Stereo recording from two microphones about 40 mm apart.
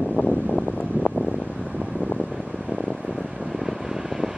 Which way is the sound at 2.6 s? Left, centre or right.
Centre.